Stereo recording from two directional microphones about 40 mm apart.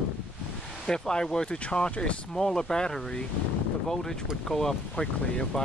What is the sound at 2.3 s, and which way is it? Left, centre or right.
Speech, centre.